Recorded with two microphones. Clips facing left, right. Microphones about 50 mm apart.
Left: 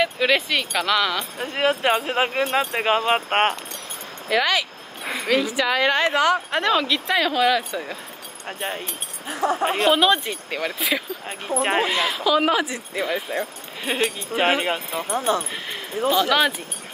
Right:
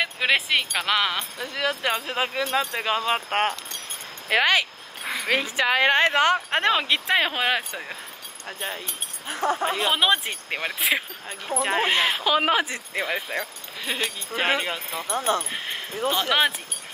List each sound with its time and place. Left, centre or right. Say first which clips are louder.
0.0 s speech: left 3 dB; centre
1.4 s speech: left 6 dB; left
4.3 s speech: even; right
9.4 s speech: left 2 dB; left
9.8 s speech: left 5 dB; centre
10.1 s speech: left 1 dB; right
11.2 s speech: left 3 dB; left
11.8 s speech: even; right
13.4 s speech: left 3 dB; left
15.1 s speech: left 2 dB; right
15.5 s speech: left 2 dB; centre